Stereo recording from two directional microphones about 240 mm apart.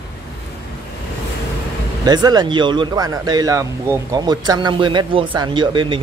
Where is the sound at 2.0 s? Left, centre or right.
Centre.